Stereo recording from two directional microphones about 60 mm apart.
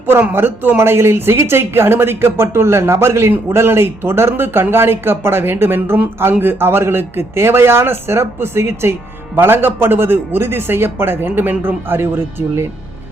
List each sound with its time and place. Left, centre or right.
0.2 s speech: right